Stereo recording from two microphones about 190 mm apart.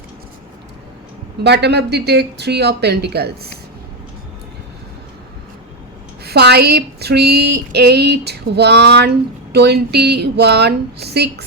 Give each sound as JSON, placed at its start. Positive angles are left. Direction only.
{"t": 1.5, "sound": "female singing", "side_deg": -60}
{"t": 6.2, "sound": "female singing", "side_deg": -60}